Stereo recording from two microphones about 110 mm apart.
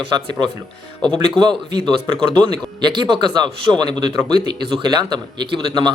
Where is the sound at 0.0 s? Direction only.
45° right (ahead or behind).